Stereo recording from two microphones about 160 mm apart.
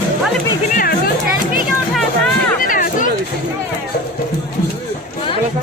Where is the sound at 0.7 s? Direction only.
65° left (ahead or behind).